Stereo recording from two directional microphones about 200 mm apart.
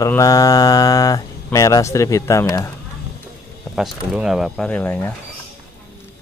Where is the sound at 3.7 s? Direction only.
Centre (ahead or behind).